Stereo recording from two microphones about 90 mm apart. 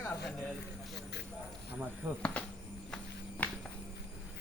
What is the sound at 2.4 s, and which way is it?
Speech, 10° left (ahead or behind).